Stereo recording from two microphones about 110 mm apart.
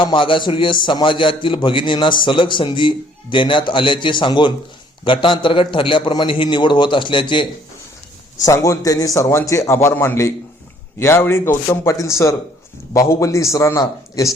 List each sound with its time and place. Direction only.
0.0 s a man's voice: 50° left (ahead or behind)
8.4 s a man's voice: 30° left (ahead or behind)